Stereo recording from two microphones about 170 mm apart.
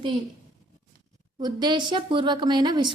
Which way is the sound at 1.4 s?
25° right (ahead or behind).